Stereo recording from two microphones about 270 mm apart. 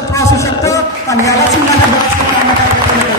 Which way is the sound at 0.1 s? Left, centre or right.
Centre.